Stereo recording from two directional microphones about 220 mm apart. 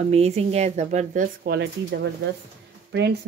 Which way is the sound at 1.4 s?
50° right (ahead or behind).